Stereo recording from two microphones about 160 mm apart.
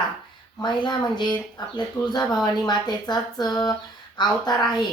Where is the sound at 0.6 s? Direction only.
25° left (ahead or behind).